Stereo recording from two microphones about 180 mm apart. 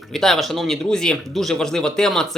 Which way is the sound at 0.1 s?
Centre (ahead or behind).